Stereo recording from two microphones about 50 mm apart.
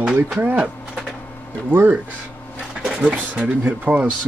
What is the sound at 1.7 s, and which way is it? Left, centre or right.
Speech, right.